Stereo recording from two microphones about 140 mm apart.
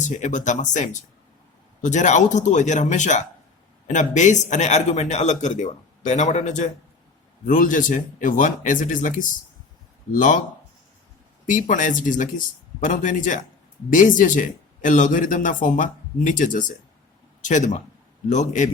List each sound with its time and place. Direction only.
0.0 s a man's voice: 60° left (ahead or behind)
11.4 s a man's voice: 70° left (ahead or behind)
18.3 s a man's voice: 60° left (ahead or behind)